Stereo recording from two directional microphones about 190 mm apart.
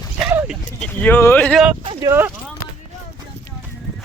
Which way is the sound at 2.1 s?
10° right (ahead or behind).